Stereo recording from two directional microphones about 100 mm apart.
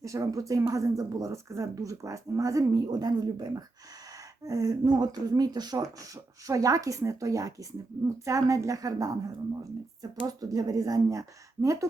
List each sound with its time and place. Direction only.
0.0 s speech: 35° right (ahead or behind)